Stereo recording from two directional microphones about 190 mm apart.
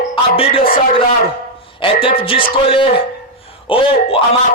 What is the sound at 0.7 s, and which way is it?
Speech, 45° left (ahead or behind).